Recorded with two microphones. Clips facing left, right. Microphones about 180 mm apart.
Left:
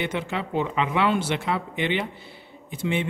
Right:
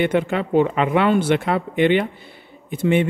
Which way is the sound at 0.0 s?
55° right (ahead or behind).